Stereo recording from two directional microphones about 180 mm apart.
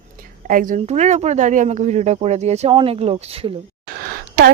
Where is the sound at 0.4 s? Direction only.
50° right (ahead or behind); by 3.5 s 35° right (ahead or behind).